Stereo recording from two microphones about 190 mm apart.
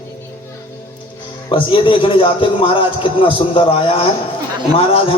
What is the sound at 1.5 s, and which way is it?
A man's voice, 25° left (ahead or behind).